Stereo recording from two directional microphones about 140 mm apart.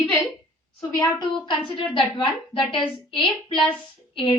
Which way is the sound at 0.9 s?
30° left (ahead or behind).